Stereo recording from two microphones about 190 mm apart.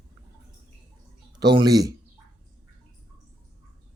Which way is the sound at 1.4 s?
20° right (ahead or behind).